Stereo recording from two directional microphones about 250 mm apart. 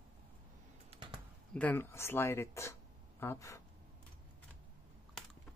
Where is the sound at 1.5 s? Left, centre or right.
Centre.